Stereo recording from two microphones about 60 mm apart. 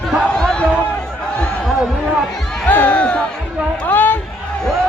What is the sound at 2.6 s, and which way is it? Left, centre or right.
Music, left.